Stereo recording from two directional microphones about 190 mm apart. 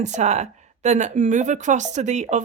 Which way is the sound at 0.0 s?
35° right (ahead or behind).